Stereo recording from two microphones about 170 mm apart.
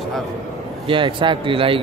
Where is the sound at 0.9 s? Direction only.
30° right (ahead or behind).